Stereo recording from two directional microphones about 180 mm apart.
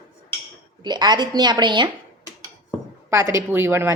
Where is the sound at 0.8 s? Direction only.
25° right (ahead or behind).